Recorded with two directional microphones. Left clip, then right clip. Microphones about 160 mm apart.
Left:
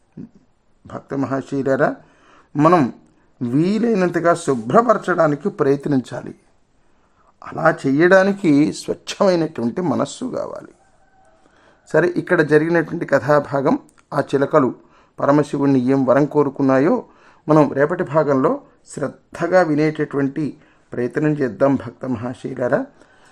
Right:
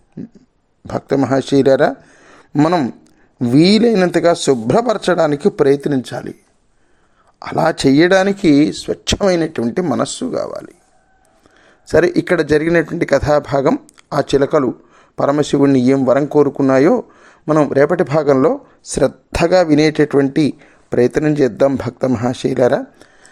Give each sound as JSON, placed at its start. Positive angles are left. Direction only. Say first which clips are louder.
{"t": 0.9, "sound": "speech", "louder": "right 8 dB", "side_deg": -30}
{"t": 2.5, "sound": "speech", "louder": "even", "side_deg": -15}
{"t": 3.4, "sound": "speech", "louder": "right 8 dB", "side_deg": -25}
{"t": 5.8, "sound": "speech", "louder": "right 3 dB", "side_deg": -5}
{"t": 7.3, "sound": "speech", "louder": "right 2 dB", "side_deg": -25}
{"t": 8.4, "sound": "speech", "louder": "right 4 dB", "side_deg": 0}
{"t": 9.0, "sound": "speech", "louder": "right 2 dB", "side_deg": -20}
{"t": 11.9, "sound": "speech", "louder": "right 4 dB", "side_deg": -15}
{"t": 17.4, "sound": "a man's voice", "louder": "even", "side_deg": 0}
{"t": 17.7, "sound": "speech", "louder": "right 6 dB", "side_deg": -25}
{"t": 18.4, "sound": "speech", "louder": "right 4 dB", "side_deg": -40}